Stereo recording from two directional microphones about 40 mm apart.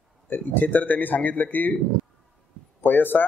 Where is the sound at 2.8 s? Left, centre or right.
Left.